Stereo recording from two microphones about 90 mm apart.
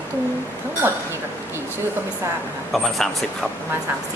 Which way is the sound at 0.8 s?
25° right (ahead or behind).